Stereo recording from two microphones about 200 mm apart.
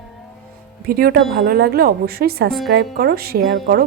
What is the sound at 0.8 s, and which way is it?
A woman's voice, 50° right (ahead or behind).